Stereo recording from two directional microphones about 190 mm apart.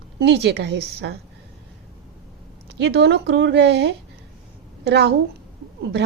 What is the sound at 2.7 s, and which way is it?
A woman's voice, 65° right (ahead or behind).